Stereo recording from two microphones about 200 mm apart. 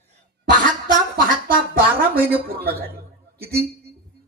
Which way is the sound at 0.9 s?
45° right (ahead or behind).